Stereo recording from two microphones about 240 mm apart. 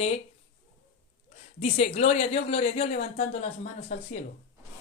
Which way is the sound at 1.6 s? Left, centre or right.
Left.